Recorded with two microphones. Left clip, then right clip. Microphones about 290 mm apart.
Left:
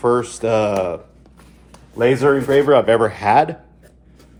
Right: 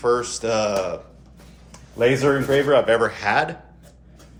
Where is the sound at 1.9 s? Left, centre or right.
Left.